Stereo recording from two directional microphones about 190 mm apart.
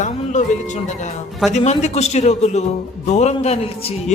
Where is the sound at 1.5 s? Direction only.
35° left (ahead or behind).